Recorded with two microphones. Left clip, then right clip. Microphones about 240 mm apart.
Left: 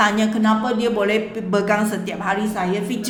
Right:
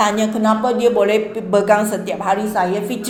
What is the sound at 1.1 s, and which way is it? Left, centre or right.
Speech, centre.